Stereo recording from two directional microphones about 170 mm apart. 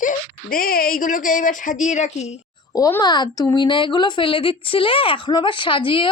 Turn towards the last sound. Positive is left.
turn(degrees=30)  # may be behind; listen again after turning